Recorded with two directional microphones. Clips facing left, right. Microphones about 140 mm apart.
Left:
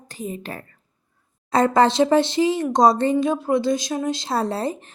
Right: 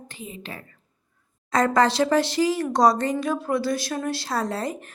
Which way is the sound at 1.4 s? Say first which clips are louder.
Left 3 dB; 25° left (ahead or behind).